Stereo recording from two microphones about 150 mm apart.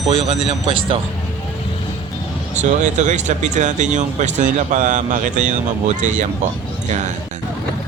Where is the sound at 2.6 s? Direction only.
55° right (ahead or behind).